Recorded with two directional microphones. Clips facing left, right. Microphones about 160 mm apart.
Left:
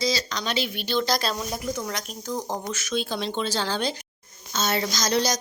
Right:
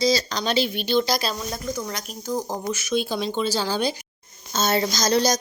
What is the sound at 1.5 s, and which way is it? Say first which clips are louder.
Speech: even; 10° left (ahead or behind).